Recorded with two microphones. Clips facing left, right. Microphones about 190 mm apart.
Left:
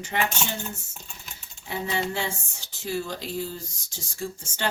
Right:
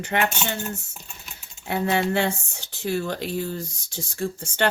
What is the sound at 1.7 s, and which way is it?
Speech, 60° right (ahead or behind).